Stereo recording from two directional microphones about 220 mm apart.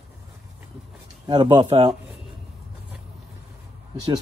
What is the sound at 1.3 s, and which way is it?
Speech, 20° right (ahead or behind).